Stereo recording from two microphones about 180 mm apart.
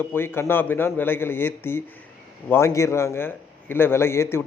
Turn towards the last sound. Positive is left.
turn(degrees=15)  # may be behind; listen again after turning